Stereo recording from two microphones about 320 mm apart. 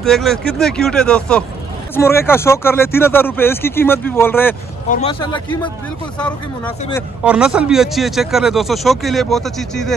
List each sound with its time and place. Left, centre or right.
0.0 s speech: centre
4.8 s speech: left
6.1 s speech: centre